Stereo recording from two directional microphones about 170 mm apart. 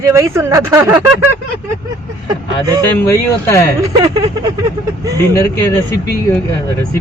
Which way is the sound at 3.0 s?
15° left (ahead or behind).